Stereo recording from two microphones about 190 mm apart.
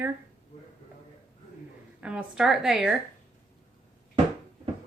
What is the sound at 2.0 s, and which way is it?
Speech, 5° right (ahead or behind).